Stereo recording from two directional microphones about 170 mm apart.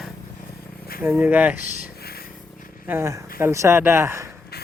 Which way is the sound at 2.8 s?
15° right (ahead or behind).